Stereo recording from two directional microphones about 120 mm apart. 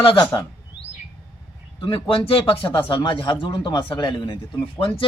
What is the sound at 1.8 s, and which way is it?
Speech, 45° left (ahead or behind).